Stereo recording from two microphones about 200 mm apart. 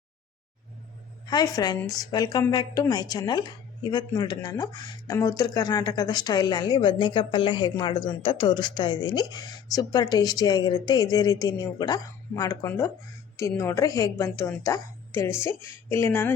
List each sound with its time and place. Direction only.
1.3 s a woman's voice: 20° left (ahead or behind)